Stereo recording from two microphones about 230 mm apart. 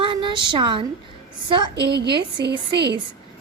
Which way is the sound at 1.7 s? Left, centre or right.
Right.